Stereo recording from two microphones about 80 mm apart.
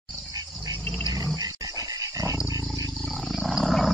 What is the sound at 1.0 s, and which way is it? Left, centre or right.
Dog, right.